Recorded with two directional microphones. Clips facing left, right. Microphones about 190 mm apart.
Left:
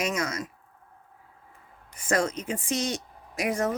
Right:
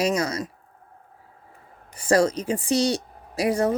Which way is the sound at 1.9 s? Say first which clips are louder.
Right 7 dB; 35° right (ahead or behind).